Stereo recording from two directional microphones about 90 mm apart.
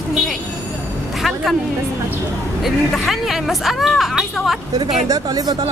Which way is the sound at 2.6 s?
Centre (ahead or behind).